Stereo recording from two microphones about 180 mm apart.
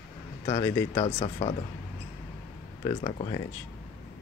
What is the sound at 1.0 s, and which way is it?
Speech, 35° left (ahead or behind).